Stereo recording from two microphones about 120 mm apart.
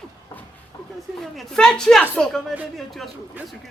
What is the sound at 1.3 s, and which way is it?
Speech, 5° left (ahead or behind).